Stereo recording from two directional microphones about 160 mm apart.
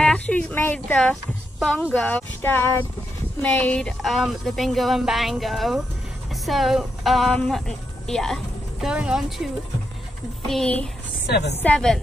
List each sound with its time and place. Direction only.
0.0 s a sound: 10° left (ahead or behind)
1.6 s speech: 10° left (ahead or behind)
10.5 s speech: 5° left (ahead or behind)